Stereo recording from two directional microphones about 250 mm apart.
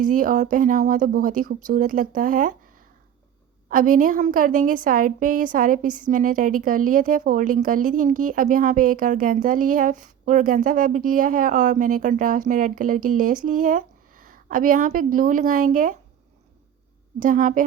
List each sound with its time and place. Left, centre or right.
0.0 s a woman's voice: right
3.7 s a woman's voice: right
17.2 s a woman's voice: right